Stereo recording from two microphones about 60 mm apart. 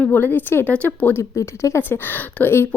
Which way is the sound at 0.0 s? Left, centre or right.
Left.